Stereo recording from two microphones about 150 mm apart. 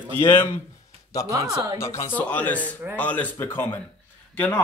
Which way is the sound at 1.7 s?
20° left (ahead or behind).